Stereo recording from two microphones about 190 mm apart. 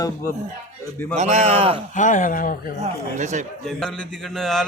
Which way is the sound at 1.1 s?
35° right (ahead or behind).